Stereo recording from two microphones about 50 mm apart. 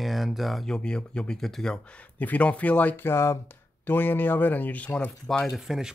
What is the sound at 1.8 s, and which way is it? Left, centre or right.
Speech, left.